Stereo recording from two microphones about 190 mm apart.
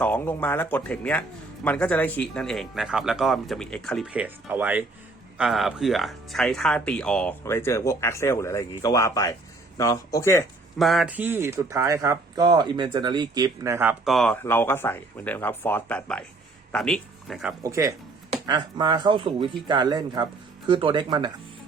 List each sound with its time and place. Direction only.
0.0 s speech: 10° left (ahead or behind)
10.8 s speech: centre (ahead or behind)
14.0 s speech: centre (ahead or behind)
17.6 s speech: 15° right (ahead or behind)